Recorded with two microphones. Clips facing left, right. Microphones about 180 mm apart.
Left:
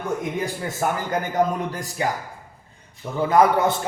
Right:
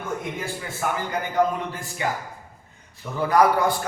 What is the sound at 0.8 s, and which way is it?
A man's voice, 45° left (ahead or behind).